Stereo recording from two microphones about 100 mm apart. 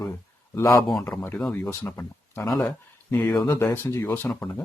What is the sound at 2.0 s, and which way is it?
Speech, 25° left (ahead or behind).